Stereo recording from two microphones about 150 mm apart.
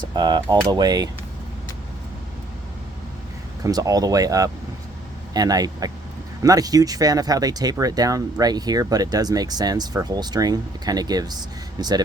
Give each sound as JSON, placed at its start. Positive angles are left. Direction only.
{"t": 0.1, "sound": "speech", "side_deg": -30}
{"t": 3.6, "sound": "speech", "side_deg": -25}